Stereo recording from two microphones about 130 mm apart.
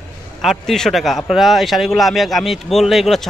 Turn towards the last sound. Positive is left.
turn(degrees=0)  # may be behind; listen again after turning